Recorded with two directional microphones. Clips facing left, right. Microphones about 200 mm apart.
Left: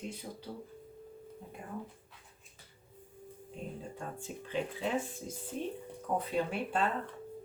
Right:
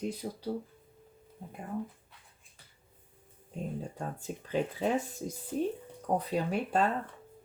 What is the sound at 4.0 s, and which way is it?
Speech, 40° right (ahead or behind).